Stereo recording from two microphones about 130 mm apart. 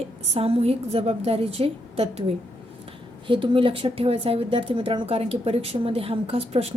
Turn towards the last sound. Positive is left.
turn(degrees=-50)  # may be behind; listen again after turning